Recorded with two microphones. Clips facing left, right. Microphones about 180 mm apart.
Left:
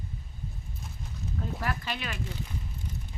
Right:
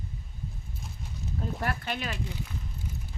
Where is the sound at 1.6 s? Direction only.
50° right (ahead or behind).